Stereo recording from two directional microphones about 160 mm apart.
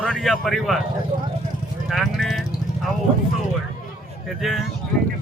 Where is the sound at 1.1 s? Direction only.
55° right (ahead or behind).